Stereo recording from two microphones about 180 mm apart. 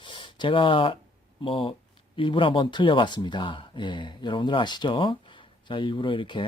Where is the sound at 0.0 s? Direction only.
25° left (ahead or behind).